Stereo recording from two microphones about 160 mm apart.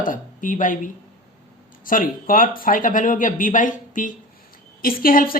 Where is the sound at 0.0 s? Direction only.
55° left (ahead or behind).